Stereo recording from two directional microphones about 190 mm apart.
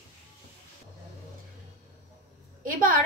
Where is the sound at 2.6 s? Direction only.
45° right (ahead or behind).